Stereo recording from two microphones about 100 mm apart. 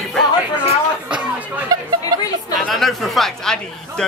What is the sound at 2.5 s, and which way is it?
A man's voice, centre (ahead or behind).